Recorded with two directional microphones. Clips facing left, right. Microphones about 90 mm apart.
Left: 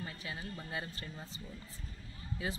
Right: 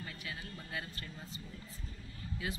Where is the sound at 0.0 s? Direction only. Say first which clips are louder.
Left 2 dB; 25° left (ahead or behind).